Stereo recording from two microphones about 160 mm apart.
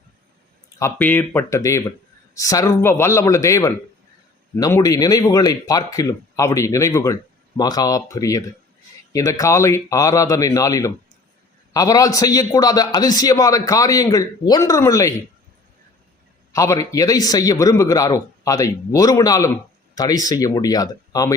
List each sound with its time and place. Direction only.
0.8 s speech: 15° left (ahead or behind)
16.5 s speech: 20° left (ahead or behind)